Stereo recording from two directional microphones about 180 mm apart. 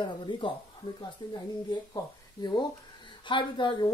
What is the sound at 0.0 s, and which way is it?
Speech, 25° left (ahead or behind).